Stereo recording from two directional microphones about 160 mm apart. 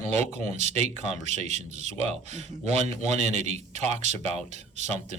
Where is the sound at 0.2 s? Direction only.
45° right (ahead or behind).